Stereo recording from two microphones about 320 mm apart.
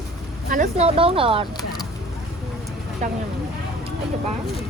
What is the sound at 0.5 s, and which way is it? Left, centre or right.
Speech, right.